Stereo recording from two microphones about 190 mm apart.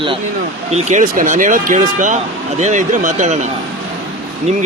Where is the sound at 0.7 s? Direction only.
40° right (ahead or behind).